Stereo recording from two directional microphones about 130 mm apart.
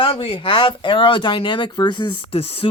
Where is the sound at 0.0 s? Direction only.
45° left (ahead or behind).